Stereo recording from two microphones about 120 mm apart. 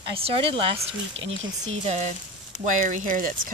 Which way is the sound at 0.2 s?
50° right (ahead or behind).